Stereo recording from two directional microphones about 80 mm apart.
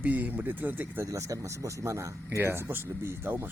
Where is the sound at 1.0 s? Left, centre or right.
Right.